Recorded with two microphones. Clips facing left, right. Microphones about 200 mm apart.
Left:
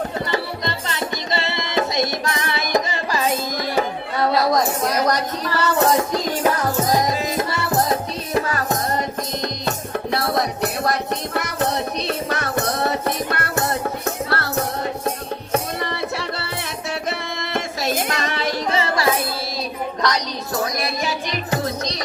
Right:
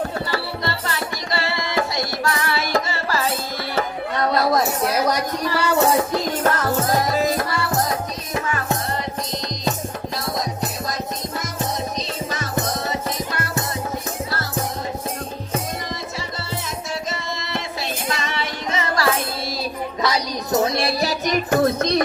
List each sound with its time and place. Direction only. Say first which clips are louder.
0.3 s music: left 1 dB; 20° left (ahead or behind)
4.3 s a sound: left 1 dB; centre (ahead or behind)
4.9 s speech: even; 10° right (ahead or behind)
6.4 s music: left 1 dB; 15° left (ahead or behind)
8.4 s music: left 3 dB; 40° left (ahead or behind)
18.0 s music: left 2 dB; 65° left (ahead or behind)
18.3 s music: left 4 dB; 35° left (ahead or behind)
20.0 s a sound: even; 5° right (ahead or behind)
20.5 s music: right 5 dB; 25° right (ahead or behind); by 22.0 s 55° right (ahead or behind)